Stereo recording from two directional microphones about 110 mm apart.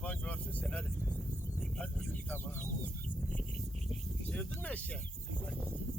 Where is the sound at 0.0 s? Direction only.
15° left (ahead or behind).